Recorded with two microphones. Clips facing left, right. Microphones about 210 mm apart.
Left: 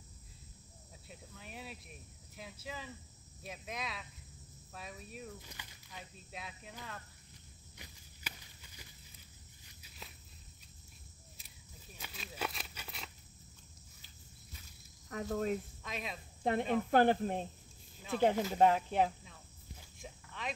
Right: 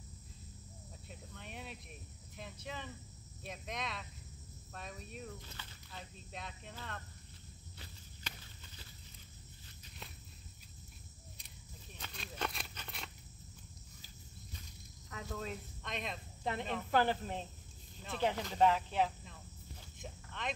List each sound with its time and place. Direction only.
1.0 s cricket: 5° left (ahead or behind)
5.5 s speech: 15° left (ahead or behind)
7.7 s walk: 10° left (ahead or behind)
11.3 s a sound: 5° left (ahead or behind)
15.0 s speech: 45° left (ahead or behind)
15.8 s speech: 5° left (ahead or behind)
16.9 s speech: 50° left (ahead or behind)
18.3 s speech: 10° left (ahead or behind)
18.6 s speech: 50° left (ahead or behind)
20.0 s a sound: 5° left (ahead or behind)